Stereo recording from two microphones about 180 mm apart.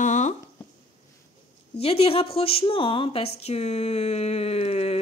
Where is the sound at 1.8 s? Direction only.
30° left (ahead or behind).